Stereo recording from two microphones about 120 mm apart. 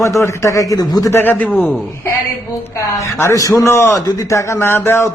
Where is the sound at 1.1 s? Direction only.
15° left (ahead or behind).